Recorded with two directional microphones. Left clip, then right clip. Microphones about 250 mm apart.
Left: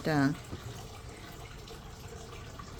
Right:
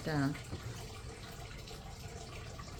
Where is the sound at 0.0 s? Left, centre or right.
Left.